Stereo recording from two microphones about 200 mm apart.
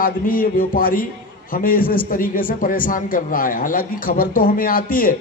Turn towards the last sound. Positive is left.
turn(degrees=45)  # may be behind; listen again after turning